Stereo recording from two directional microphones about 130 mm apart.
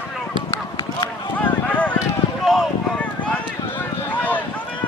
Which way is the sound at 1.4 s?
10° left (ahead or behind).